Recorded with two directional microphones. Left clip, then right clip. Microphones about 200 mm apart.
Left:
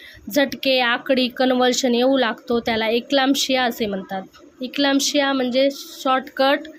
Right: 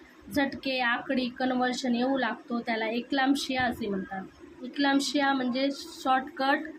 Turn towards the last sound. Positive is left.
turn(degrees=50)  # may be behind; listen again after turning